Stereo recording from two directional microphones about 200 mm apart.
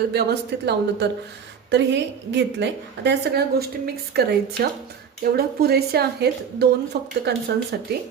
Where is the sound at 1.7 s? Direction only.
60° right (ahead or behind).